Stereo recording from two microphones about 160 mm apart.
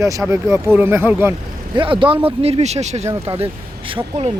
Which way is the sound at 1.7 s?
30° right (ahead or behind).